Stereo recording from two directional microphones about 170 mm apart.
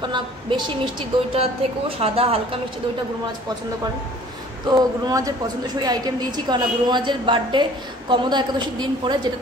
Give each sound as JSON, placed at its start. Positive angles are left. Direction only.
{"t": 0.1, "sound": "a woman's voice", "side_deg": -30}
{"t": 4.6, "sound": "a woman's voice", "side_deg": -25}